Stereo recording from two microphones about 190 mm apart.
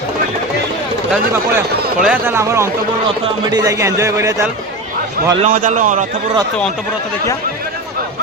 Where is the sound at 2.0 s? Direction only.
10° right (ahead or behind).